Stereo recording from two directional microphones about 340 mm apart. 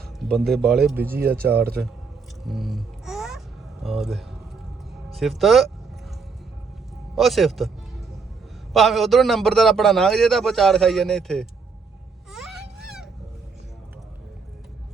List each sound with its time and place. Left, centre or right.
0.2 s a man's voice: centre
1.4 s speech: right
2.5 s babbling: centre
3.8 s a man's voice: centre
7.2 s a man's voice: centre
8.7 s a man's voice: centre